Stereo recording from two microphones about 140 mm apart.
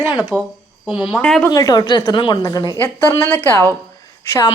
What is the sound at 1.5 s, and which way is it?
Speech, 25° left (ahead or behind).